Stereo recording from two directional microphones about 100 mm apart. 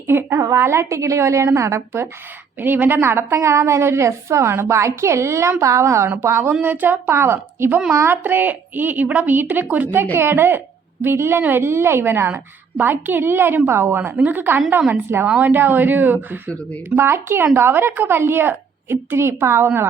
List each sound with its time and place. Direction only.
0.1 s a woman's voice: 25° right (ahead or behind)